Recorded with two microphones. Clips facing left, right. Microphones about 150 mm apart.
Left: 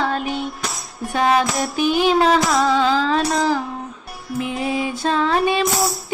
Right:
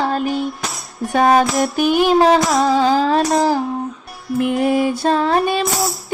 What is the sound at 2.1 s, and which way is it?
Child singing, 35° right (ahead or behind).